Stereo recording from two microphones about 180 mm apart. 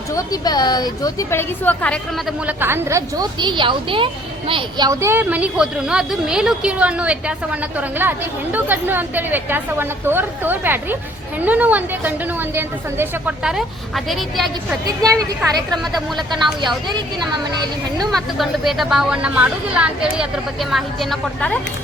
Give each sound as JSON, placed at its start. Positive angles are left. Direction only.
{"t": 0.1, "sound": "a woman's voice", "side_deg": 20}
{"t": 2.5, "sound": "a woman's voice", "side_deg": -10}
{"t": 15.1, "sound": "a woman's voice", "side_deg": -20}
{"t": 15.7, "sound": "speech", "side_deg": 0}
{"t": 17.5, "sound": "speech", "side_deg": -25}
{"t": 18.3, "sound": "speech", "side_deg": 0}